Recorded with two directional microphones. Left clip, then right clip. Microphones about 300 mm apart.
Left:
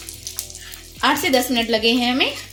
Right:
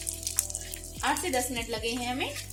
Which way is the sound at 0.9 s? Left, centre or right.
Left.